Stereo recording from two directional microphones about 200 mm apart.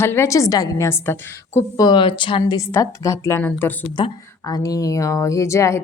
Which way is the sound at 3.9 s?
20° left (ahead or behind).